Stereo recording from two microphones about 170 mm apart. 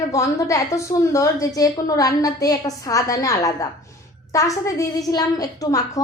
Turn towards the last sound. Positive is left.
turn(degrees=20)  # may be behind; listen again after turning